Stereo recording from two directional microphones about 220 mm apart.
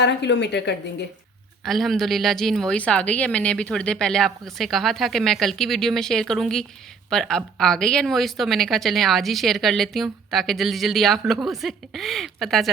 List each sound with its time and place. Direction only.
0.0 s a woman's voice: 50° left (ahead or behind)
1.6 s speech: centre (ahead or behind)